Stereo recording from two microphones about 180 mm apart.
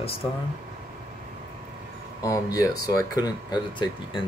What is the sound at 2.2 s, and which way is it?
Speech, 20° left (ahead or behind).